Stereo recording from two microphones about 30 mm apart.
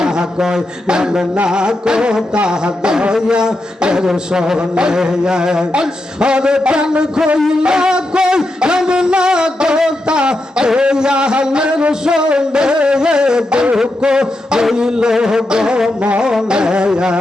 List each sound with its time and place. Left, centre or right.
0.0 s speech: right
1.5 s music: right
2.5 s a sound: right